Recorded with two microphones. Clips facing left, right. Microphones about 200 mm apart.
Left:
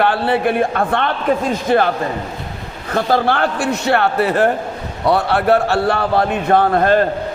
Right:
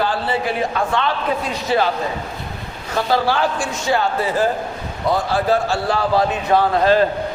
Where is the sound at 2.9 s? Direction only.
55° left (ahead or behind).